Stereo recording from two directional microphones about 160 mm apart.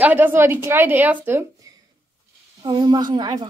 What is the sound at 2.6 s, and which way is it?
Speech, 30° right (ahead or behind).